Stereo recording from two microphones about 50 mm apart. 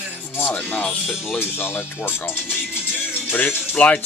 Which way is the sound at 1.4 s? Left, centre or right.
Left.